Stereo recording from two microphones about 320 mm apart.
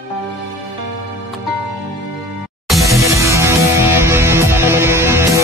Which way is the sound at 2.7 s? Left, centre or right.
Centre.